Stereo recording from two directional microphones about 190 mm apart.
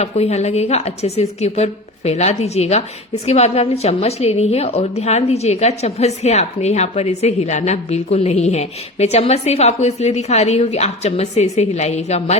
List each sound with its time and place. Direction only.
0.0 s a woman's voice: 35° left (ahead or behind)